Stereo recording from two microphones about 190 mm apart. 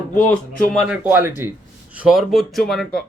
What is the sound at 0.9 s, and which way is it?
Speech, 10° right (ahead or behind).